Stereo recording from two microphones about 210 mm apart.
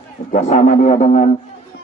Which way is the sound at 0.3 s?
35° left (ahead or behind).